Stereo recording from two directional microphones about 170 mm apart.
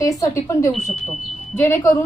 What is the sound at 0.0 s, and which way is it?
A woman's voice, 20° left (ahead or behind).